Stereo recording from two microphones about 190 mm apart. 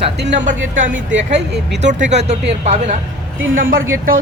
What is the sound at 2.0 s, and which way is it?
Speech, 35° right (ahead or behind).